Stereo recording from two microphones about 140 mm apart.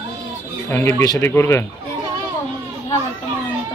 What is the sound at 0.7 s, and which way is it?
Speech, 15° left (ahead or behind).